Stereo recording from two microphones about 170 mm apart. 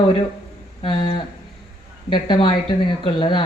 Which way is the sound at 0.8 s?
30° left (ahead or behind).